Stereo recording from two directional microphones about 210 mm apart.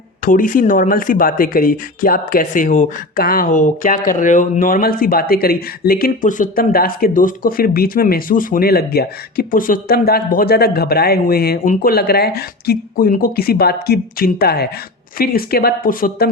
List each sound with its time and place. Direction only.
0.3 s speech: 40° left (ahead or behind)